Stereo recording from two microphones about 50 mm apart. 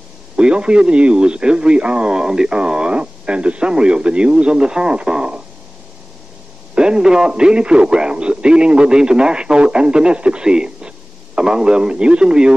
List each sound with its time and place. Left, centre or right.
0.4 s speech: centre
6.7 s speech: centre